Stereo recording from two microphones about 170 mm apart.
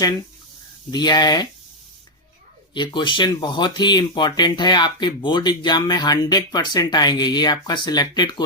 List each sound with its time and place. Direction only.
0.9 s speech: 25° left (ahead or behind)
2.7 s speech: 25° left (ahead or behind)